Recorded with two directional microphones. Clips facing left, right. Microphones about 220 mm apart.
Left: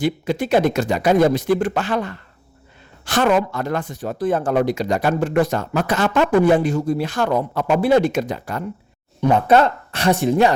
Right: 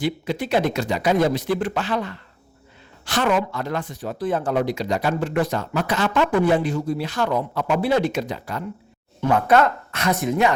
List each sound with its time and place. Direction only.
0.0 s speech: 50° left (ahead or behind)
9.2 s speech: 25° left (ahead or behind)